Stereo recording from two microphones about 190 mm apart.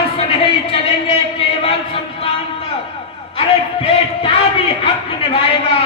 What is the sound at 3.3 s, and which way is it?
A man's voice, 30° left (ahead or behind).